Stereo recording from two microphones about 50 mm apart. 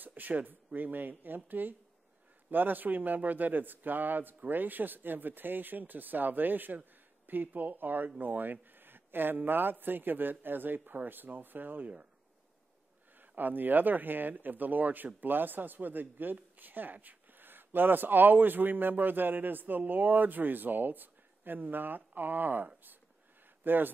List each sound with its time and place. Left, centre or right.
0.0 s speech: right
13.2 s speech: right